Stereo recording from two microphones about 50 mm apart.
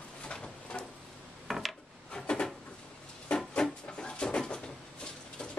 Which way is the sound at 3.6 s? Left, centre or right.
Centre.